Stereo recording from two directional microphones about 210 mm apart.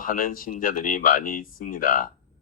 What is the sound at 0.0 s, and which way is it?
A man's voice, 40° left (ahead or behind).